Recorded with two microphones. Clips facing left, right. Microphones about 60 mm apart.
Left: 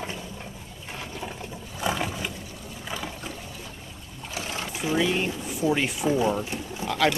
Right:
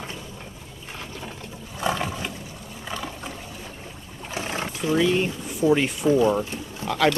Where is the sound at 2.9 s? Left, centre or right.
Centre.